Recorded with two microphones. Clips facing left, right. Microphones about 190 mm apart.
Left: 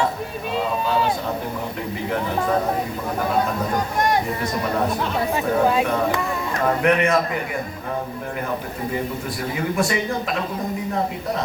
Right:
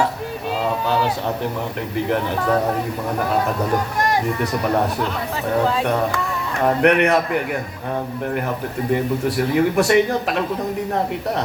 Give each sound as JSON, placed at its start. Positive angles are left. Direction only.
{"t": 5.6, "sound": "speech", "side_deg": 15}
{"t": 6.8, "sound": "a man's voice", "side_deg": -70}
{"t": 9.6, "sound": "a man's voice", "side_deg": -70}